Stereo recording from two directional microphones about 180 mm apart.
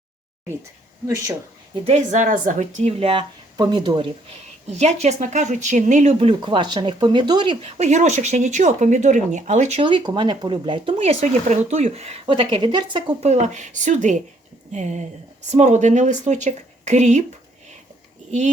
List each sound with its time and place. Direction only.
1.8 s speech: 40° right (ahead or behind)
4.8 s speech: 40° right (ahead or behind)
13.2 s a woman's voice: 40° right (ahead or behind)
18.3 s speech: 40° right (ahead or behind)